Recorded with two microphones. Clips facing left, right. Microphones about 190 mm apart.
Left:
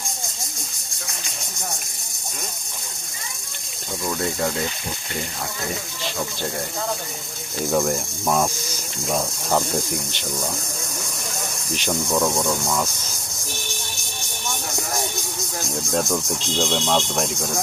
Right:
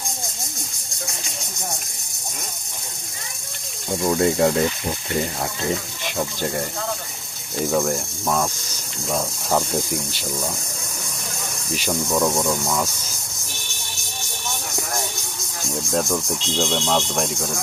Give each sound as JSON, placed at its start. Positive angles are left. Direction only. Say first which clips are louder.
{"t": 4.0, "sound": "speech", "louder": "right 7 dB", "side_deg": -25}
{"t": 7.7, "sound": "speech", "louder": "left 1 dB", "side_deg": 0}
{"t": 11.7, "sound": "speech", "louder": "right 1 dB", "side_deg": 0}
{"t": 15.7, "sound": "speech", "louder": "right 1 dB", "side_deg": 0}